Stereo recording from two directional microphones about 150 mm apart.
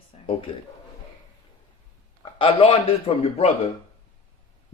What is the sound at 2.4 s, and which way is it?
Speech, 35° left (ahead or behind).